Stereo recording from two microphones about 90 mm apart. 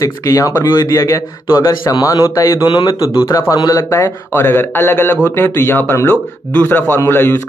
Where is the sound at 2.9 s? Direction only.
40° left (ahead or behind).